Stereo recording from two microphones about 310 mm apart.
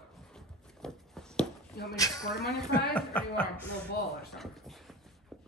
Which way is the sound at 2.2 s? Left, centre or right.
Centre.